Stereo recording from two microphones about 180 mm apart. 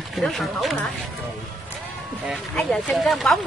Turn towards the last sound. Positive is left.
turn(degrees=0)  # may be behind; listen again after turning